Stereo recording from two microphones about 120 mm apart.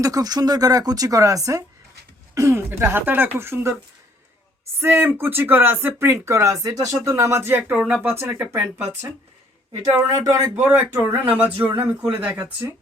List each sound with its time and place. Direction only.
0.0 s speech: 30° right (ahead or behind)
4.8 s speech: 20° right (ahead or behind)
10.1 s speech: 30° right (ahead or behind)
10.5 s speech: 15° right (ahead or behind)